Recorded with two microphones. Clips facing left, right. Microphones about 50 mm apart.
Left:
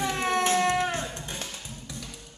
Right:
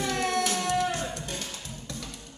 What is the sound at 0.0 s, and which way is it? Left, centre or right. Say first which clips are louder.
Music: left 2 dB; left.